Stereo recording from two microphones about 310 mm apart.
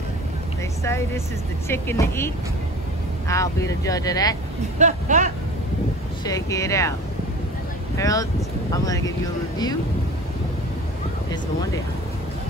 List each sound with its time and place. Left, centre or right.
0.8 s speech: centre
4.7 s speech: right
6.2 s speech: centre
8.0 s speech: centre